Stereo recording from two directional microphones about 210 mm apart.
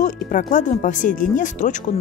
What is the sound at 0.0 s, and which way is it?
Speech, 40° left (ahead or behind).